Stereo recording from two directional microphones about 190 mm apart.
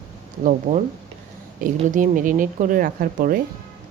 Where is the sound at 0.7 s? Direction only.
40° right (ahead or behind).